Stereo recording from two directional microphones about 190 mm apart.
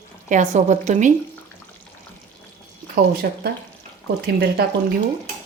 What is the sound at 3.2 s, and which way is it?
Speech, 60° right (ahead or behind).